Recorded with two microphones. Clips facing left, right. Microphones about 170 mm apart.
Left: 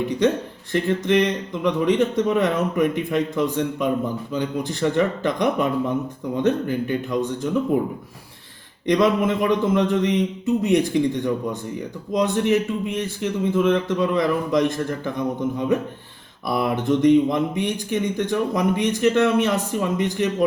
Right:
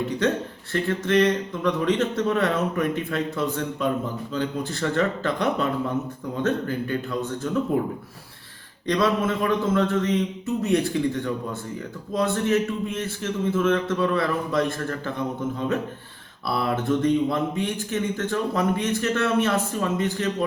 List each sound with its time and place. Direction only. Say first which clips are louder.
0.7 s a man's voice: left 3 dB; 15° left (ahead or behind)
8.9 s a man's voice: left 4 dB; 15° left (ahead or behind)
16.5 s a man's voice: left 3 dB; 15° left (ahead or behind)